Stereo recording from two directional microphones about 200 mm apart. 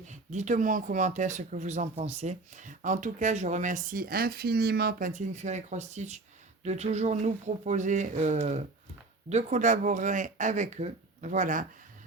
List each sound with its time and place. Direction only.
0.1 s speech: 35° right (ahead or behind)